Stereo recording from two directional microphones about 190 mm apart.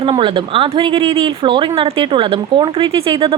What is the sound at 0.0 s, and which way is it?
Speech, 30° right (ahead or behind).